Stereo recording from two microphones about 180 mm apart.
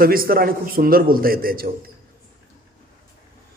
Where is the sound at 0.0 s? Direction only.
55° right (ahead or behind).